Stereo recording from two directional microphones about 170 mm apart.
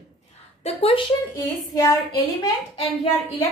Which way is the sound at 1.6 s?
20° left (ahead or behind).